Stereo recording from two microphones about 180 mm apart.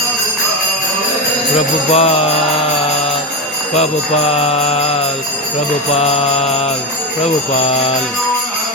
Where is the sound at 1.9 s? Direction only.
35° left (ahead or behind).